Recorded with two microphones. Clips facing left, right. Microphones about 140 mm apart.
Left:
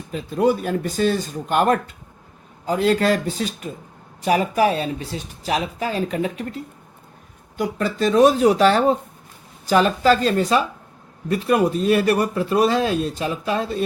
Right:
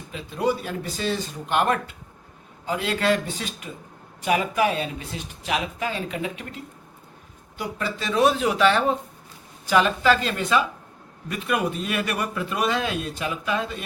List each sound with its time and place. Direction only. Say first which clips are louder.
0.1 s speech: left 6 dB; 45° left (ahead or behind)